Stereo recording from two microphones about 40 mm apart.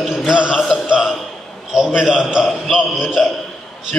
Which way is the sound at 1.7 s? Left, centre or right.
Centre.